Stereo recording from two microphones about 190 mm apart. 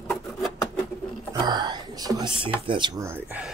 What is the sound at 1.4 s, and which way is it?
Whispering, 20° right (ahead or behind).